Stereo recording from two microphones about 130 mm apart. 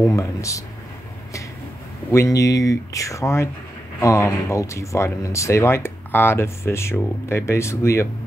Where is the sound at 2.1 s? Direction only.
25° left (ahead or behind).